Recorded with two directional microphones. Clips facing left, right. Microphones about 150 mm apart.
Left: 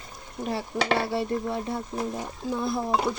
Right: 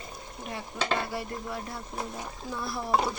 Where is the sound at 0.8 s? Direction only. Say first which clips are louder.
Left 4 dB; 75° left (ahead or behind).